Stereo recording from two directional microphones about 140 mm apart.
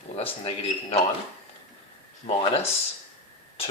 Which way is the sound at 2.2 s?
45° left (ahead or behind).